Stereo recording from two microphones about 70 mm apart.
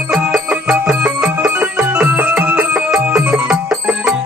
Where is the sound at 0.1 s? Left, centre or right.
Centre.